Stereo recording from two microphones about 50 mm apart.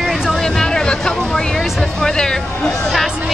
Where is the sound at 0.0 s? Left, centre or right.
Centre.